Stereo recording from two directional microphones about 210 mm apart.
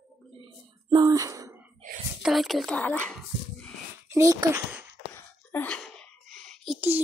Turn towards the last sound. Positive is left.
turn(degrees=-10)  # may be behind; listen again after turning